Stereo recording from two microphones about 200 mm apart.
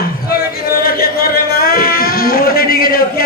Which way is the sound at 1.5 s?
50° left (ahead or behind).